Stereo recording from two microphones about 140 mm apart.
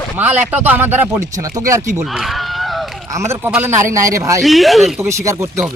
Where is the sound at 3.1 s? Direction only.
20° right (ahead or behind).